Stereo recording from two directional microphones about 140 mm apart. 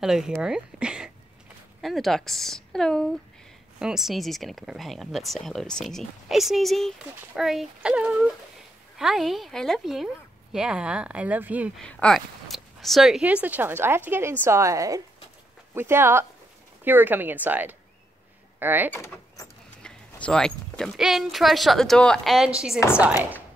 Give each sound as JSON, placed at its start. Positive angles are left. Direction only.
{"t": 0.0, "sound": "speech", "side_deg": -5}
{"t": 11.7, "sound": "a woman's voice", "side_deg": 5}
{"t": 18.9, "sound": "speech", "side_deg": 20}
{"t": 19.8, "sound": "speech", "side_deg": 5}
{"t": 22.8, "sound": "a woman's voice", "side_deg": 20}